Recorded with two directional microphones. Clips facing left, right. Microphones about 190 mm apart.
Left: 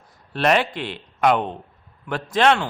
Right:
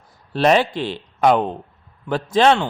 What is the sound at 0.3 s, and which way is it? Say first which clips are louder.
A man's voice: right 4 dB; 35° right (ahead or behind).